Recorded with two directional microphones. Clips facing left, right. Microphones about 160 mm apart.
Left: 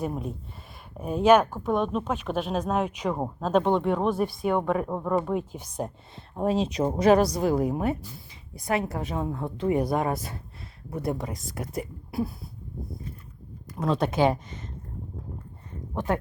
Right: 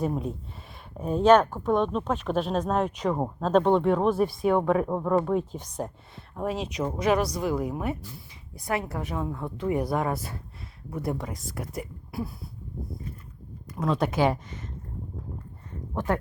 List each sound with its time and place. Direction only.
0.0 s speech: 5° left (ahead or behind)
6.3 s a woman's voice: 30° left (ahead or behind)
13.7 s a woman's voice: 30° left (ahead or behind)